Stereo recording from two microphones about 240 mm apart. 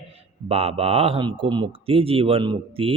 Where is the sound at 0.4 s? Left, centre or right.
Right.